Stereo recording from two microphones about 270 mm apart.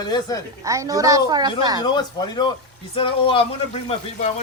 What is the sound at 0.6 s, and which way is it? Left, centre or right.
Speech, centre.